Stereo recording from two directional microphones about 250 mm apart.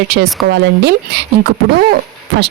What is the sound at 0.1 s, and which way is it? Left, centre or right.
Speech, right.